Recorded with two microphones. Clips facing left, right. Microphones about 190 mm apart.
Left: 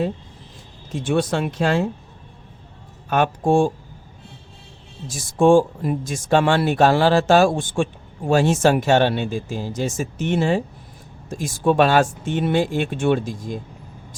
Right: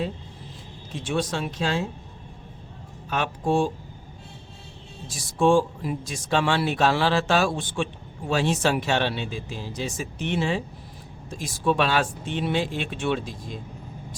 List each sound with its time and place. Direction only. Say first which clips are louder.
0.9 s speech: left 6 dB; 55° left (ahead or behind)
3.1 s speech: left 6 dB; 50° left (ahead or behind)
5.0 s speech: left 5 dB; 50° left (ahead or behind)